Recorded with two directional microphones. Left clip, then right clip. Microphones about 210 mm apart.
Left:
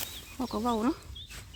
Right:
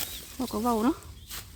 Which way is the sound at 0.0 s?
Centre (ahead or behind).